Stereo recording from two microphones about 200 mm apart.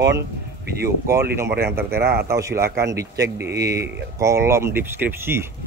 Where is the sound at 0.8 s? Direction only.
15° right (ahead or behind).